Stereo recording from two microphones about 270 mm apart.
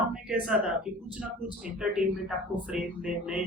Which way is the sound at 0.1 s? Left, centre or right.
Centre.